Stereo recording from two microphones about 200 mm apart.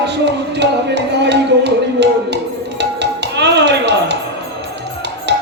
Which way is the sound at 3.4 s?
60° right (ahead or behind).